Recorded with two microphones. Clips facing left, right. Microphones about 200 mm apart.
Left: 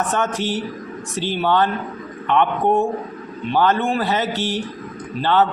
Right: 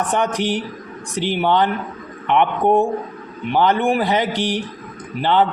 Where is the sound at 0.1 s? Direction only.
15° right (ahead or behind).